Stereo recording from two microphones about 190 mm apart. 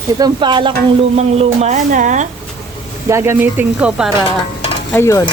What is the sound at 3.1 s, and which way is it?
Speech, 15° right (ahead or behind).